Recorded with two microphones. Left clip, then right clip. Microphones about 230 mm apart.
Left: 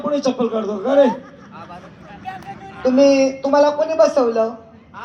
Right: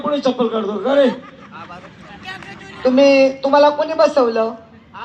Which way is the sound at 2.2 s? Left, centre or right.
Left.